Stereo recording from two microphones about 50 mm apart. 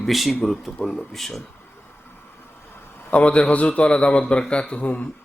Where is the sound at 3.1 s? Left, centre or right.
Left.